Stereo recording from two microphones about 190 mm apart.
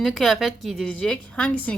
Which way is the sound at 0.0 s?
Centre (ahead or behind).